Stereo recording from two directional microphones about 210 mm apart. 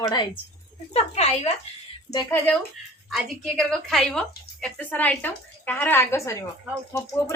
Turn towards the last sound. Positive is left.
turn(degrees=15)  # may be behind; listen again after turning